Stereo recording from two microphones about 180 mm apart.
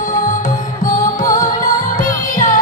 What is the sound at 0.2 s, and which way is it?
Music, 45° left (ahead or behind).